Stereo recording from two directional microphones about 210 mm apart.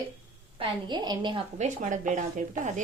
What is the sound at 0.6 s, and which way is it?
A woman's voice, 20° right (ahead or behind).